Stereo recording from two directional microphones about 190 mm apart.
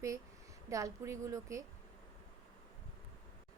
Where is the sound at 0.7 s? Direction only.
15° right (ahead or behind).